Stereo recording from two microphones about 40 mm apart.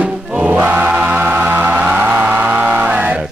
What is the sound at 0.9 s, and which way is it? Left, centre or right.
Music, right.